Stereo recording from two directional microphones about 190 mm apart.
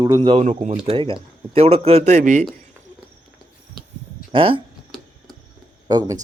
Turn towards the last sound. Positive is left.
turn(degrees=-20)  # may be behind; listen again after turning